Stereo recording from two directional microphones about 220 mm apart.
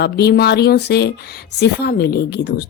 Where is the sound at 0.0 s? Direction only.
50° left (ahead or behind).